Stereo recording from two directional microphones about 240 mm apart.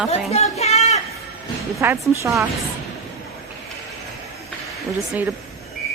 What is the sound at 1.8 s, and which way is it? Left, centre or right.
Speech, centre.